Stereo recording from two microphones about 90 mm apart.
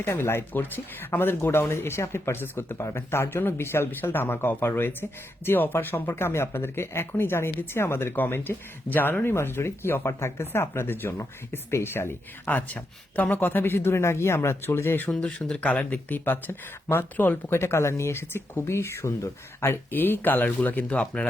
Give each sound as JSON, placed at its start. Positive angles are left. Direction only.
{"t": 0.0, "sound": "speech", "side_deg": 25}
{"t": 15.1, "sound": "speech", "side_deg": 5}